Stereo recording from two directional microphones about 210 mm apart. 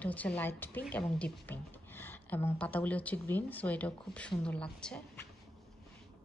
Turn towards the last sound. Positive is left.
turn(degrees=5)  # may be behind; listen again after turning